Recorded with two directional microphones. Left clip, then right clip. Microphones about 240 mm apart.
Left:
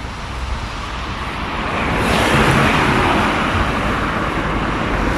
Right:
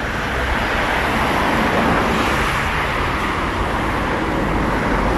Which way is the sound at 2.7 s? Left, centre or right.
Left.